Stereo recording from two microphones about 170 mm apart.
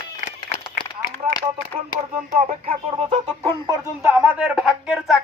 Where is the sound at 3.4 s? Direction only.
15° right (ahead or behind).